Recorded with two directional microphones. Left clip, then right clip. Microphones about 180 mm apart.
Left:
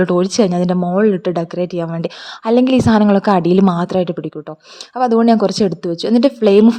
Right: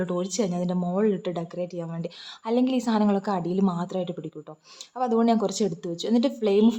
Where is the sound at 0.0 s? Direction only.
40° left (ahead or behind).